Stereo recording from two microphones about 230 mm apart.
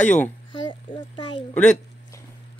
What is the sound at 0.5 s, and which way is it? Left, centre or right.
Speech, left.